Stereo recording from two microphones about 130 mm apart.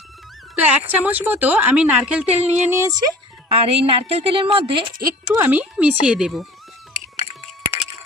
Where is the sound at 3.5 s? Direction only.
45° right (ahead or behind).